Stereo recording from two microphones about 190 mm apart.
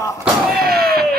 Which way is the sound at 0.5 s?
55° right (ahead or behind).